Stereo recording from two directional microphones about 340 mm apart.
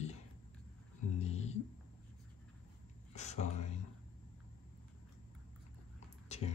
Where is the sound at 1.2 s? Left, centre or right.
Centre.